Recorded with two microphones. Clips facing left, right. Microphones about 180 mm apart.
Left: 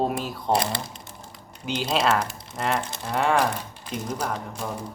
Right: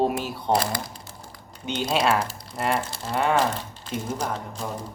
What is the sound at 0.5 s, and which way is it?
Speech, 25° left (ahead or behind).